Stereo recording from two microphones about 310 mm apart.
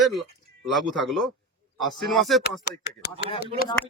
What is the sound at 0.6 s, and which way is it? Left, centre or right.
Speech, centre.